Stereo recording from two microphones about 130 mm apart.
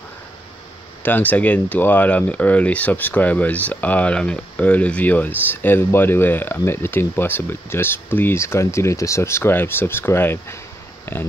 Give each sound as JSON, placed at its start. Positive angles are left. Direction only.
{"t": 1.0, "sound": "speech", "side_deg": 15}